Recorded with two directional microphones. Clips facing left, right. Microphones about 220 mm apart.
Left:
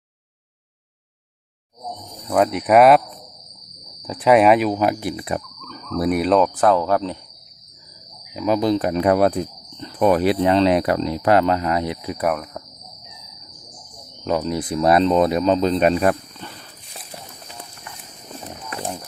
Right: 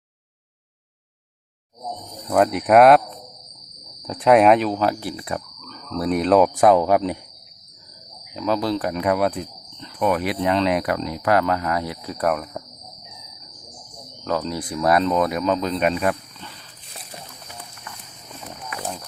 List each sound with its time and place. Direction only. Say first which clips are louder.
2.2 s speech: even; centre (ahead or behind)
4.0 s speech: even; centre (ahead or behind)
6.4 s speech: right 2 dB; 10° right (ahead or behind)
8.3 s speech: left 4 dB; 10° left (ahead or behind)
12.1 s speech: right 2 dB; 5° left (ahead or behind)
14.3 s speech: left 3 dB; 20° left (ahead or behind); by 16.6 s 45° left (ahead or behind)
18.3 s wild animals: left 2 dB; 30° left (ahead or behind)